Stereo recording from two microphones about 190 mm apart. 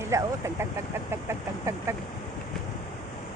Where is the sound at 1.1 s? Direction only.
15° right (ahead or behind).